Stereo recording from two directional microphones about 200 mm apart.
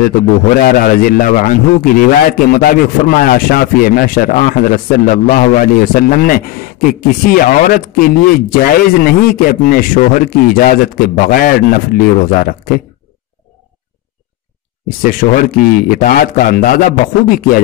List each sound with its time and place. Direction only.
0.6 s a man's voice: 45° left (ahead or behind)
15.0 s a man's voice: 45° left (ahead or behind)